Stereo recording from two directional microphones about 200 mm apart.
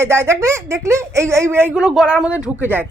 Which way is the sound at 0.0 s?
15° right (ahead or behind).